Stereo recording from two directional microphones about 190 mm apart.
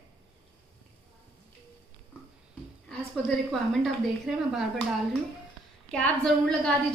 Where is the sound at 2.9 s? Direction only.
Centre (ahead or behind).